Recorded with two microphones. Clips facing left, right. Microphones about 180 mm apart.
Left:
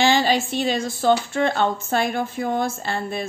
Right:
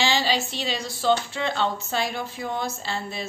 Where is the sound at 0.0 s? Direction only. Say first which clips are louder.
Left 5 dB; 55° left (ahead or behind).